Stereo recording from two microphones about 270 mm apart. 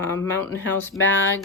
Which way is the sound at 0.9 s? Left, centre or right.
Left.